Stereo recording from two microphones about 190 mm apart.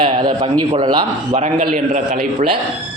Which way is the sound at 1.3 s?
35° right (ahead or behind).